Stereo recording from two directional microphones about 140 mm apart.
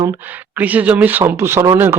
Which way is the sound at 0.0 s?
15° right (ahead or behind).